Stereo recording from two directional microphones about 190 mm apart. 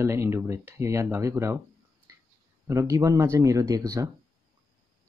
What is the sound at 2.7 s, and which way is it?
Speech, 15° right (ahead or behind).